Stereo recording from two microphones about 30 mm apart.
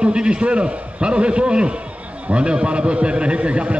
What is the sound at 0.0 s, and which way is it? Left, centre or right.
A man's voice, right.